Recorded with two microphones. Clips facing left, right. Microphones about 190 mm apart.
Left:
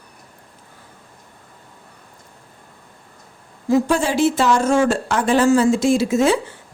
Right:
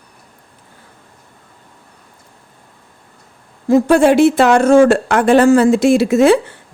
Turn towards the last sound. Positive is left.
turn(degrees=-65)  # may be behind; listen again after turning